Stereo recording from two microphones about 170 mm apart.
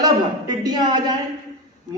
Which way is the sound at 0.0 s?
25° right (ahead or behind).